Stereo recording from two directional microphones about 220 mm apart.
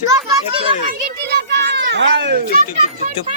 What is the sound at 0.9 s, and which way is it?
Children playing, 50° right (ahead or behind).